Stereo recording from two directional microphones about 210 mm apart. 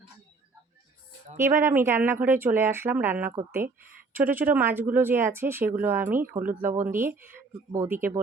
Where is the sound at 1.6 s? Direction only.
10° right (ahead or behind).